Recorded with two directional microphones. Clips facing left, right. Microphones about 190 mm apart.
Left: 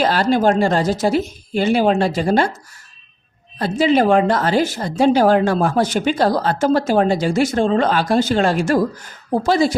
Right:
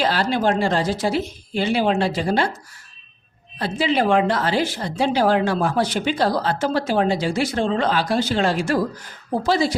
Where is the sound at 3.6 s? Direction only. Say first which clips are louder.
Left 5 dB; 45° left (ahead or behind).